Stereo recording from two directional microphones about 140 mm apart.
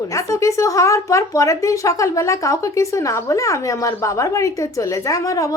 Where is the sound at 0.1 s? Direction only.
20° left (ahead or behind).